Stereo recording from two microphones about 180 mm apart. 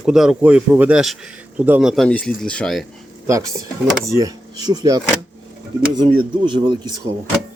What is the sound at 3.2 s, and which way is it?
Speech, 15° right (ahead or behind).